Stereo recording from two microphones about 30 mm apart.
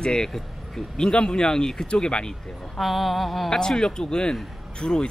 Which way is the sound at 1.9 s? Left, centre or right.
Left.